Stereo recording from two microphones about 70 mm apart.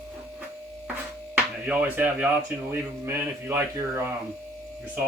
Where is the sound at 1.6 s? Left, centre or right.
Right.